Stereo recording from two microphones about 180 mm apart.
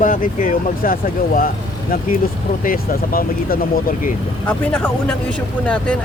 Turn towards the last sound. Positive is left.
turn(degrees=5)  # may be behind; listen again after turning